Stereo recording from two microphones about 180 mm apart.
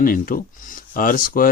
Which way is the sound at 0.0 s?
50° left (ahead or behind).